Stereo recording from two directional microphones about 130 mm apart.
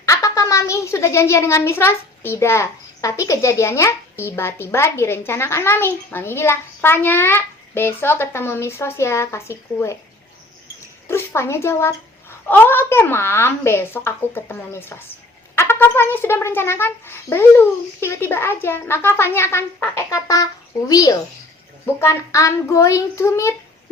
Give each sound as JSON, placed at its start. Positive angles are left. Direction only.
{"t": 0.0, "sound": "a woman's voice", "side_deg": 25}
{"t": 11.1, "sound": "a woman's voice", "side_deg": 20}